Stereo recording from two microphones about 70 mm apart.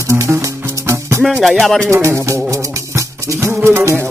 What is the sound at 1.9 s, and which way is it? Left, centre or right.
Music, right.